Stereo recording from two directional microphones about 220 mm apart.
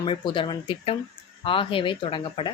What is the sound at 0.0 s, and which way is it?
Speech, 20° left (ahead or behind).